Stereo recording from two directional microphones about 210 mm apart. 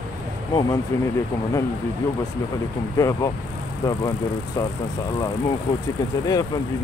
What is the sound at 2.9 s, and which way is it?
Speech, 15° left (ahead or behind).